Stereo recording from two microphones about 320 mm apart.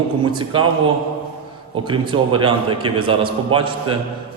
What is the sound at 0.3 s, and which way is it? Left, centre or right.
Speech, centre.